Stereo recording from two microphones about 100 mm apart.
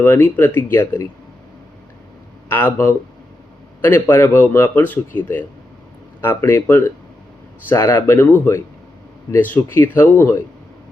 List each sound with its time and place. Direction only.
0.0 s a man's voice: 25° left (ahead or behind)
2.5 s a man's voice: 20° left (ahead or behind)